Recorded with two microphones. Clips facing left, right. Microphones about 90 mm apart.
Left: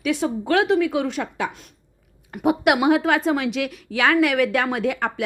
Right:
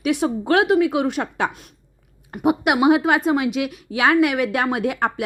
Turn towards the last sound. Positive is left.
turn(degrees=-20)  # may be behind; listen again after turning